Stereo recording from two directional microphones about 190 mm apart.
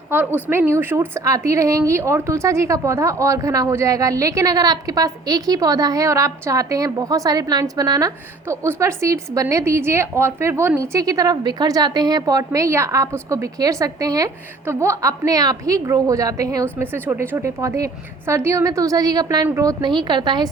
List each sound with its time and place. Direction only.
0.1 s a woman's voice: 10° right (ahead or behind)